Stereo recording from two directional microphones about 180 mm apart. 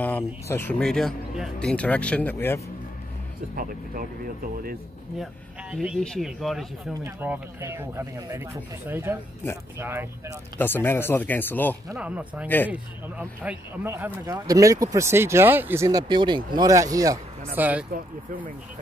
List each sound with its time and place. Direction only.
0.0 s speech: 10° left (ahead or behind)
3.5 s speech: 50° right (ahead or behind)
5.2 s speech: centre (ahead or behind)
7.0 s speech: 10° right (ahead or behind)
10.6 s speech: 10° left (ahead or behind)
12.0 s speech: 5° right (ahead or behind)